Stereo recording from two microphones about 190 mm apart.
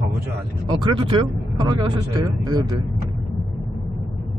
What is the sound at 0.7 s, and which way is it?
Speech, 25° right (ahead or behind).